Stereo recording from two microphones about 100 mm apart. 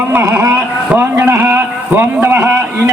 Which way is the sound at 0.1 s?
25° right (ahead or behind).